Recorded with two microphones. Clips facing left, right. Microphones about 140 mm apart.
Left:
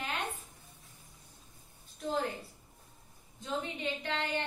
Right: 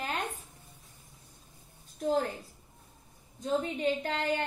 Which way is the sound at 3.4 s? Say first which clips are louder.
Right 7 dB; 40° right (ahead or behind).